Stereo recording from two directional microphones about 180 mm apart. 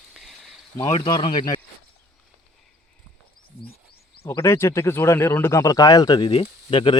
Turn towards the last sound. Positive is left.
turn(degrees=25)  # may be behind; listen again after turning